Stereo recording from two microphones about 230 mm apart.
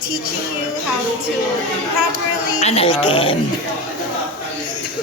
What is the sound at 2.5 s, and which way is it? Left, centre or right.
Speech, left.